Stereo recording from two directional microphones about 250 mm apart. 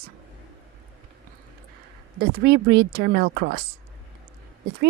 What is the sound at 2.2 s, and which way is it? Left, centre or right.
Speech, right.